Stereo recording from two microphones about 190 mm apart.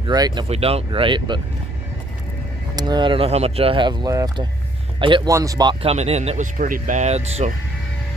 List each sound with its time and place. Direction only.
0.0 s speech: 20° right (ahead or behind)
2.7 s speech: 20° right (ahead or behind)